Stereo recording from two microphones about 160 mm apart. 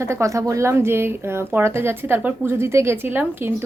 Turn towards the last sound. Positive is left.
turn(degrees=-15)  # may be behind; listen again after turning